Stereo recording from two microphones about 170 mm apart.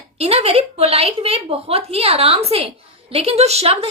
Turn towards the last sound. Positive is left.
turn(degrees=-35)  # may be behind; listen again after turning